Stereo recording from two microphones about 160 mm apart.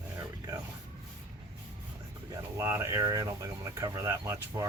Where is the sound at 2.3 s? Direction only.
15° right (ahead or behind).